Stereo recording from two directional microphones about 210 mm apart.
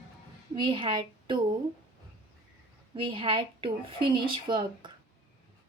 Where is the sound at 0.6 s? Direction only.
25° right (ahead or behind).